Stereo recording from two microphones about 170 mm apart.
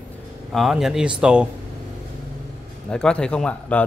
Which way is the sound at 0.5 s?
Centre (ahead or behind).